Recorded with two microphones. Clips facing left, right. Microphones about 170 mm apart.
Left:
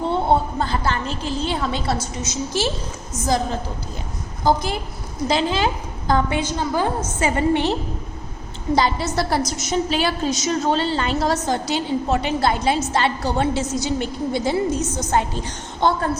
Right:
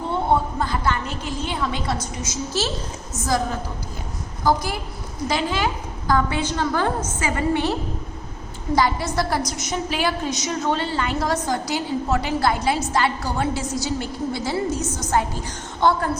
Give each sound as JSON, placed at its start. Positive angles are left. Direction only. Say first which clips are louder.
{"t": 0.1, "sound": "a woman's voice", "louder": "even", "side_deg": 30}
{"t": 7.2, "sound": "a woman's voice", "louder": "left 4 dB", "side_deg": 25}